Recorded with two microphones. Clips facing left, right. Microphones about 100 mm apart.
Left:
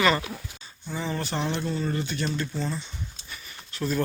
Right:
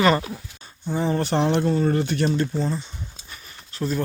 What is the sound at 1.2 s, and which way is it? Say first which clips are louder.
Speech: right 9 dB; 60° right (ahead or behind).